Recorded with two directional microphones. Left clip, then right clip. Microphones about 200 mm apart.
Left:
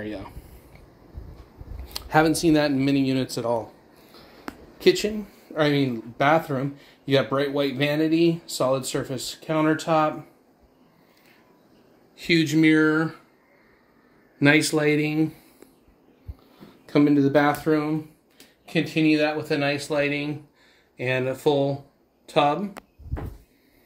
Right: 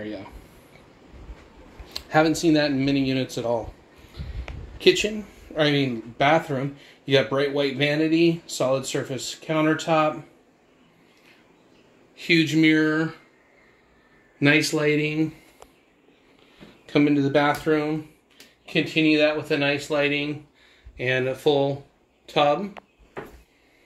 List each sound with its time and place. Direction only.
0.0 s speech: 10° left (ahead or behind)
1.9 s speech: 10° left (ahead or behind)
4.7 s speech: 5° left (ahead or behind)
12.2 s speech: 10° left (ahead or behind)
14.4 s speech: 15° left (ahead or behind)
16.9 s speech: 10° left (ahead or behind)
19.2 s speech: 10° left (ahead or behind)